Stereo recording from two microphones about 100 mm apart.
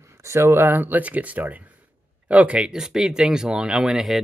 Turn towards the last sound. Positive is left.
turn(degrees=-5)  # may be behind; listen again after turning